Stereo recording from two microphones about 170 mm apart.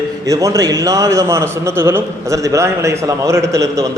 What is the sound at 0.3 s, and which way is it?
A man's voice, 20° right (ahead or behind).